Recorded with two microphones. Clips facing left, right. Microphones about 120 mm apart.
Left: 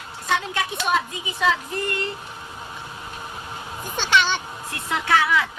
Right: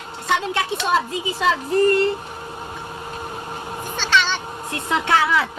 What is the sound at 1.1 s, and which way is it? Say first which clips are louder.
Speech: right 2 dB; 30° right (ahead or behind).